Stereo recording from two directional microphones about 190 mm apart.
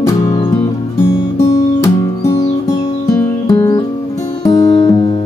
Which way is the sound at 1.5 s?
20° left (ahead or behind).